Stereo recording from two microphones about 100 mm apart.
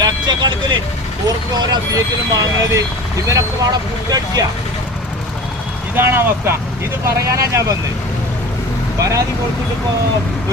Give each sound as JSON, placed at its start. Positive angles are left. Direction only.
{"t": 0.0, "sound": "vehicle", "side_deg": -45}
{"t": 1.7, "sound": "speech", "side_deg": -35}
{"t": 6.0, "sound": "speech", "side_deg": -25}
{"t": 9.0, "sound": "speech", "side_deg": -35}